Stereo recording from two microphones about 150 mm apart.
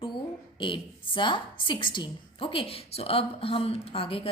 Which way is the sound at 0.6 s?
35° left (ahead or behind).